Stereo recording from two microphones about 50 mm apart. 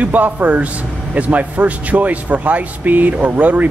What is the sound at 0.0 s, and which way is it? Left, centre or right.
A man's voice, right.